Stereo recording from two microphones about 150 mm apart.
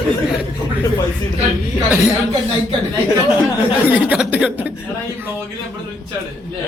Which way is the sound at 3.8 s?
10° right (ahead or behind).